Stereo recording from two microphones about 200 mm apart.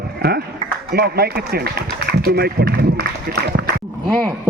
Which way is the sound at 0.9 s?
50° right (ahead or behind).